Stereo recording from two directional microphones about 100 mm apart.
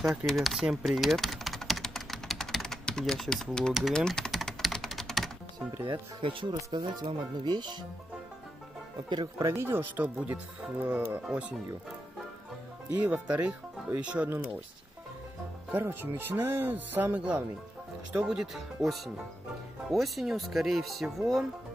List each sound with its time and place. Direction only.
0.3 s typing: centre (ahead or behind)
3.9 s speech: 5° left (ahead or behind)
4.3 s typing: centre (ahead or behind)
5.9 s speech: 55° right (ahead or behind)
9.4 s speech: 30° right (ahead or behind); by 11.5 s 10° right (ahead or behind)
12.9 s speech: 15° right (ahead or behind)
15.7 s speech: 20° right (ahead or behind); by 21.5 s centre (ahead or behind)